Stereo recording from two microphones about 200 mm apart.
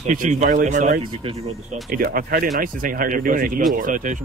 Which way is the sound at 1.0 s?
25° right (ahead or behind).